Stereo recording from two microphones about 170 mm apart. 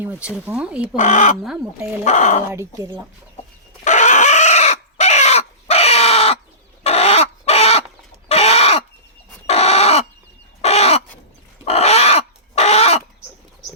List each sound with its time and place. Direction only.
0.0 s speech: 10° right (ahead or behind)
0.9 s speech: 45° left (ahead or behind)
2.5 s speech: 15° right (ahead or behind)
3.8 s chicken: 45° left (ahead or behind)
10.6 s crow: 40° left (ahead or behind)
11.6 s a sound: 40° left (ahead or behind)